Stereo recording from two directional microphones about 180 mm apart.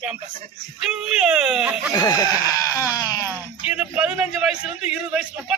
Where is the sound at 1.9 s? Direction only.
20° left (ahead or behind).